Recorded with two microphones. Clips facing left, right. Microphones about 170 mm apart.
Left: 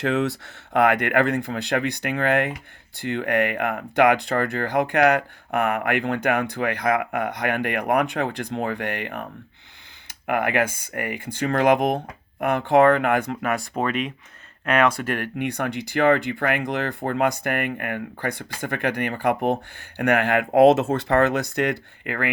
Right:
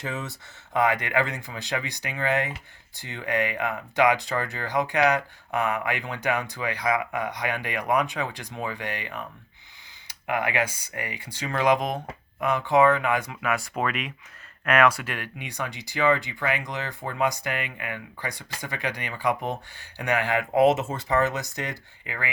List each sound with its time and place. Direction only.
0.0 s speech: 70° left (ahead or behind); by 13.7 s 45° left (ahead or behind)
13.7 s speech: 35° left (ahead or behind)
15.0 s speech: 50° left (ahead or behind)